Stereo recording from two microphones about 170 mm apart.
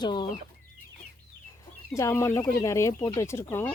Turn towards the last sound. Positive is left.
turn(degrees=15)  # may be behind; listen again after turning